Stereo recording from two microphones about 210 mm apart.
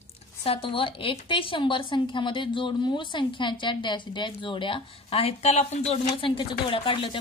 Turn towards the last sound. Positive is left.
turn(degrees=25)  # may be behind; listen again after turning